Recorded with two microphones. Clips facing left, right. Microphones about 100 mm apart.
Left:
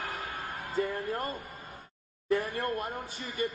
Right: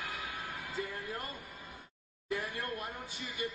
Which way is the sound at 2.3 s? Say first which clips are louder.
Left 8 dB; 45° left (ahead or behind).